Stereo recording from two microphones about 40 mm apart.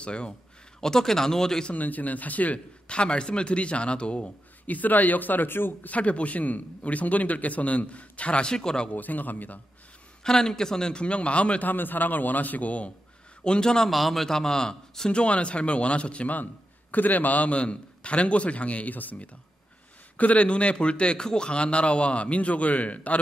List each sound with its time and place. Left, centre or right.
0.0 s speech: left
0.7 s speech: centre
1.7 s a man's voice: left
2.9 s a man's voice: left
4.6 s a man's voice: left
5.9 s a man's voice: left; by 8.9 s centre
8.9 s a man's voice: left
10.2 s a man's voice: centre; by 11.7 s left
11.7 s a man's voice: left
13.4 s a man's voice: left
13.8 s a man's voice: centre; by 16.3 s left
16.9 s a man's voice: left